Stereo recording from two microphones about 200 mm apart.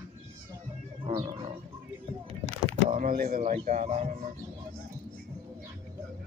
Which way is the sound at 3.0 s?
45° right (ahead or behind).